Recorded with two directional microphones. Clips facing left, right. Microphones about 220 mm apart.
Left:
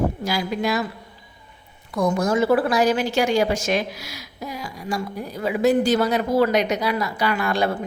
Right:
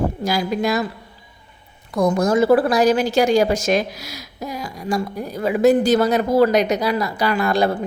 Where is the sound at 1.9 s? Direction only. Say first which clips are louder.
Right 3 dB; 40° right (ahead or behind).